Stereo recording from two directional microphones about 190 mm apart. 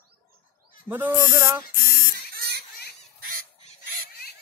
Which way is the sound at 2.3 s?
55° right (ahead or behind).